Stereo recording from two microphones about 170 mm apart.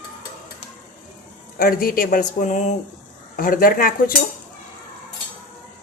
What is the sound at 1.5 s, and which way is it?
Speech, 60° left (ahead or behind).